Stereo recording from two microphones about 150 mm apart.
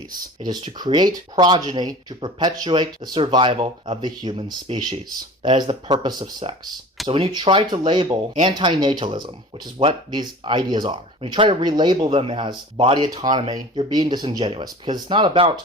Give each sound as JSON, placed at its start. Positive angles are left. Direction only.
{"t": 0.4, "sound": "speech", "side_deg": -30}